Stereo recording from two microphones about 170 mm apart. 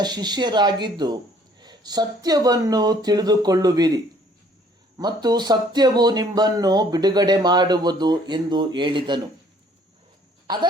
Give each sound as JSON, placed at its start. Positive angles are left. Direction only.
{"t": 0.0, "sound": "speech", "side_deg": -25}
{"t": 10.4, "sound": "cough", "side_deg": -25}